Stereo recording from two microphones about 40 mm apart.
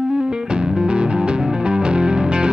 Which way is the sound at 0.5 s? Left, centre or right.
Right.